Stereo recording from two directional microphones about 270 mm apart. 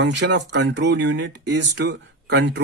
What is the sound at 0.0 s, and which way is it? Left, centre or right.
Speech, right.